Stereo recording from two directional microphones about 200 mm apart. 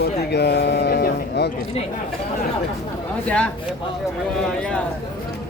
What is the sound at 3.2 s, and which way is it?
Speech, 5° left (ahead or behind).